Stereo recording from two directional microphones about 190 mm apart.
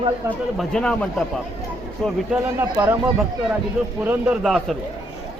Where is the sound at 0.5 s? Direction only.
5° left (ahead or behind).